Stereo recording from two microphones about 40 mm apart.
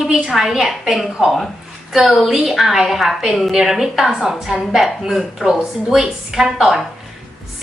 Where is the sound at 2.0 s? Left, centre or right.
Centre.